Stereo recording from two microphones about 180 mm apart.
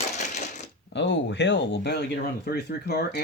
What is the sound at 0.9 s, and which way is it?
Speech, 75° left (ahead or behind).